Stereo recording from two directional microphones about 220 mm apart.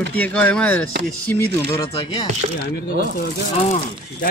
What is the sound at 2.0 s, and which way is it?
Speech, 25° left (ahead or behind).